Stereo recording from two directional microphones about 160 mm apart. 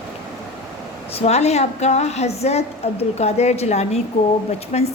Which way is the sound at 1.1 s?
40° left (ahead or behind).